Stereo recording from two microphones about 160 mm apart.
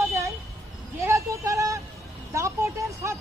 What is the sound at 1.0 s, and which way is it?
Speech, 20° right (ahead or behind).